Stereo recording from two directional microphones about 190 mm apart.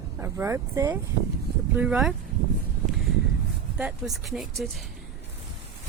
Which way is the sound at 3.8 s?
5° right (ahead or behind).